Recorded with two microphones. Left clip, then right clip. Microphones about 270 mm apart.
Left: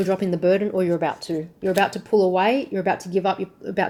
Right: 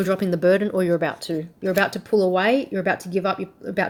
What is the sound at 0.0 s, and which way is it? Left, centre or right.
Speech, right.